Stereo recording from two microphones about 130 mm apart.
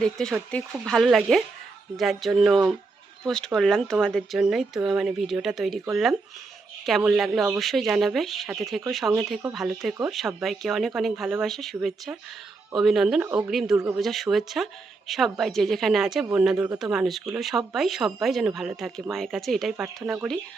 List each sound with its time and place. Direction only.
0.0 s speech: 5° left (ahead or behind)
13.2 s speech: 15° right (ahead or behind)
13.5 s speech: centre (ahead or behind)
13.7 s speech: 15° right (ahead or behind)
14.0 s speech: centre (ahead or behind)